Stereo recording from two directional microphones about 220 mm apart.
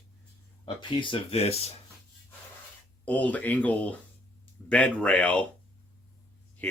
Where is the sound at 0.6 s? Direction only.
20° left (ahead or behind).